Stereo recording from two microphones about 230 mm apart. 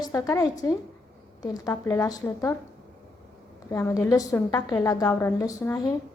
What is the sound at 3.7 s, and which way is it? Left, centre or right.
A woman's voice, centre.